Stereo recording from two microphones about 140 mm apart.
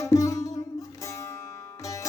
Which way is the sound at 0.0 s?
25° left (ahead or behind).